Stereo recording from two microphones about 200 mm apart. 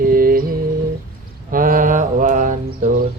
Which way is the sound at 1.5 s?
45° right (ahead or behind).